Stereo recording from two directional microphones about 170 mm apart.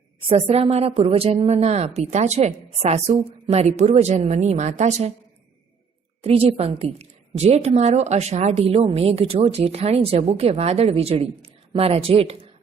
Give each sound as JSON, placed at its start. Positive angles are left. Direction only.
{"t": 0.3, "sound": "a woman's voice", "side_deg": -35}
{"t": 6.2, "sound": "a woman's voice", "side_deg": -35}